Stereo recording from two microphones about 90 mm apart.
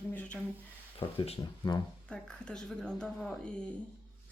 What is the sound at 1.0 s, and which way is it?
Speech, 90° left.